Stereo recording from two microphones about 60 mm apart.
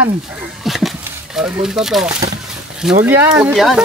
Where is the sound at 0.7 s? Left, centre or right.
Centre.